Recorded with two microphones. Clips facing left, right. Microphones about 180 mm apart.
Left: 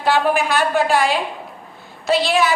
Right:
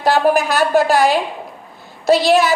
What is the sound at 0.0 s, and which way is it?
A woman's voice, 40° right (ahead or behind).